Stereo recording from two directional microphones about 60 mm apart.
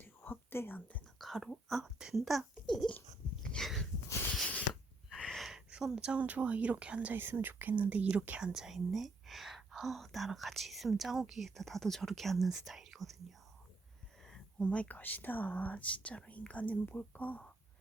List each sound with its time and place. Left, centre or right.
0.0 s whispering: left
1.2 s speech: centre
2.6 s babbling: centre
3.6 s dog: centre
5.4 s a sound: centre
5.8 s speech: centre
6.2 s speech: right
7.1 s speech: right
8.5 s speech: centre
14.6 s speech: centre